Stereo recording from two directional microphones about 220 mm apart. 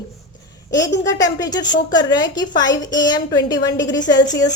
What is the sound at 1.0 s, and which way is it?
A woman's voice, 15° left (ahead or behind).